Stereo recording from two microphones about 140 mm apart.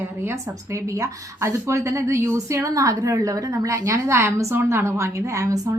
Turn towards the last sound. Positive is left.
turn(degrees=-25)  # may be behind; listen again after turning